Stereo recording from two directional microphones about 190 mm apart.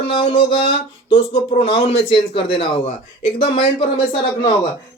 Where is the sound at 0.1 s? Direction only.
25° left (ahead or behind).